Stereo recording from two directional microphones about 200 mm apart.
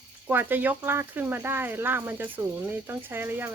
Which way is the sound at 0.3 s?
10° right (ahead or behind).